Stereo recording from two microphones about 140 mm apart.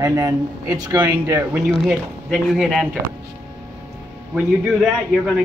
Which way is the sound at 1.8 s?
5° right (ahead or behind).